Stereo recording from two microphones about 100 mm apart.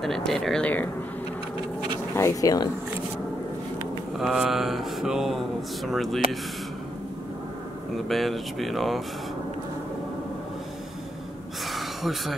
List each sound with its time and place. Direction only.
0.0 s mantra: 5° left (ahead or behind)
2.1 s speech: 25° left (ahead or behind)
4.2 s mantra: 5° right (ahead or behind)
8.1 s mantra: centre (ahead or behind)
11.7 s gasp: centre (ahead or behind)